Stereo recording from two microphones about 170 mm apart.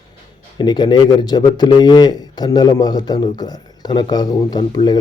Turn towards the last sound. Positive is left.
turn(degrees=30)  # may be behind; listen again after turning